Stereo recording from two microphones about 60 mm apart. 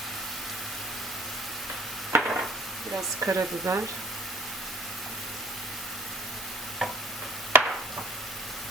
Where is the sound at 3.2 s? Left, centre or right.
Right.